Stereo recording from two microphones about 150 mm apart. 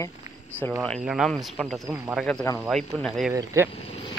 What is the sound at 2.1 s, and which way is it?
Speech, 5° left (ahead or behind).